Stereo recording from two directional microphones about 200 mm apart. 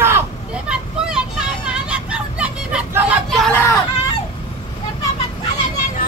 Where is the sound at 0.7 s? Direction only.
5° right (ahead or behind).